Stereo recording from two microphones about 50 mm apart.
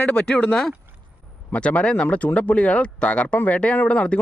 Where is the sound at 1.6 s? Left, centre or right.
Left.